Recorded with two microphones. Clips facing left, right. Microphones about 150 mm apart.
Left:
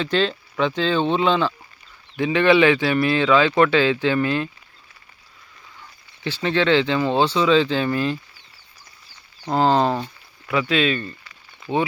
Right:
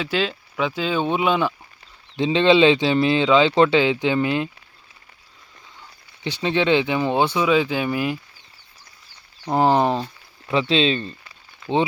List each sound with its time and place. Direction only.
0.0 s speech: 5° right (ahead or behind)
6.2 s speech: 15° right (ahead or behind)
9.5 s speech: 15° right (ahead or behind)